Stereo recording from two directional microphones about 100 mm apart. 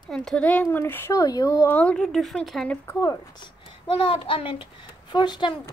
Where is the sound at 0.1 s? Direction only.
5° left (ahead or behind); by 1.1 s 20° left (ahead or behind).